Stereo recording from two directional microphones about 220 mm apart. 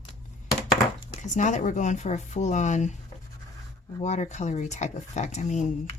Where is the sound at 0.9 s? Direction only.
35° left (ahead or behind).